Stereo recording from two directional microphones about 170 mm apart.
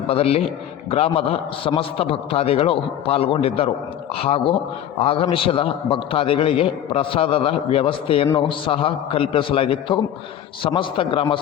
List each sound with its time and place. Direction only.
0.1 s a man's voice: 35° left (ahead or behind)